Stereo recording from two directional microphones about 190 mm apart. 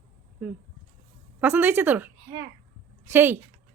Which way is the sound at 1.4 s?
10° right (ahead or behind).